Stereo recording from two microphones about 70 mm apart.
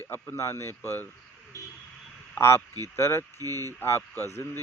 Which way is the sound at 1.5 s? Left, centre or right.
Left.